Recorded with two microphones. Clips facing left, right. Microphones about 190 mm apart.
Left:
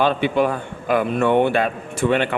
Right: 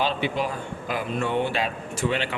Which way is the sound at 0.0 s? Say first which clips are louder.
Left 7 dB; 55° left (ahead or behind).